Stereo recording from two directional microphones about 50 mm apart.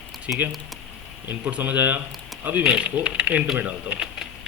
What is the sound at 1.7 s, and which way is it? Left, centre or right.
Speech, right.